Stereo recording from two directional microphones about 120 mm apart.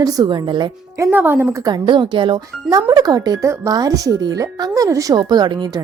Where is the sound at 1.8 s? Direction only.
40° right (ahead or behind).